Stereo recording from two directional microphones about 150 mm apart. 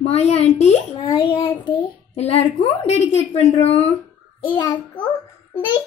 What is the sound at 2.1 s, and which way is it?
A woman's voice, 45° left (ahead or behind).